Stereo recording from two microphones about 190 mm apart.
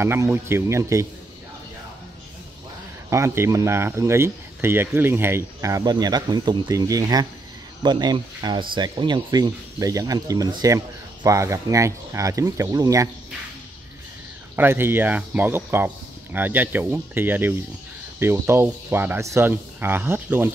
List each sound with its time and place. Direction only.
0.0 s speech: 15° right (ahead or behind)
3.1 s speech: 15° right (ahead or behind)
14.5 s speech: 10° right (ahead or behind)